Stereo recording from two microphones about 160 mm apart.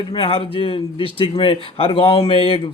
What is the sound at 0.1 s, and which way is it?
Speech, 35° left (ahead or behind).